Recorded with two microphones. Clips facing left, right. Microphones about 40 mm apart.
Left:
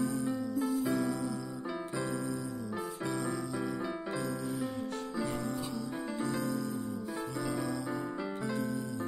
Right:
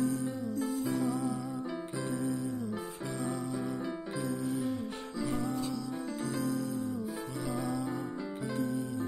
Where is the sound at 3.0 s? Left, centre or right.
Left.